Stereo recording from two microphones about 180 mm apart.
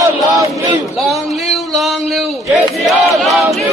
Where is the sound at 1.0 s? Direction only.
Centre (ahead or behind).